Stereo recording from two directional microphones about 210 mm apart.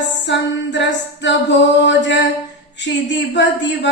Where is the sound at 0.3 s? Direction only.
55° left (ahead or behind).